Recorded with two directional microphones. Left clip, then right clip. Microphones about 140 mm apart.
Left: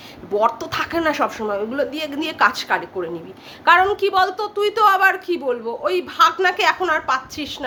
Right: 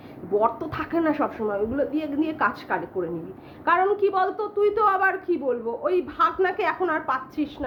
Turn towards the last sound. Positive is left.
turn(degrees=10)  # may be behind; listen again after turning